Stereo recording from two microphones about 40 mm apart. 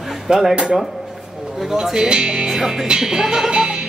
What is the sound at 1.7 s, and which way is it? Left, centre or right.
Music, centre.